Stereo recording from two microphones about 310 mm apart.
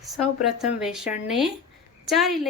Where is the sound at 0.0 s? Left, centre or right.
Centre.